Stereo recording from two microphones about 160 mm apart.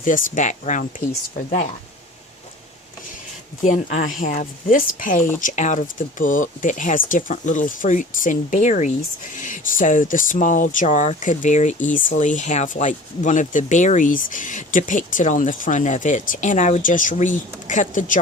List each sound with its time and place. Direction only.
0.0 s speech: 55° left (ahead or behind)
3.6 s speech: 50° left (ahead or behind)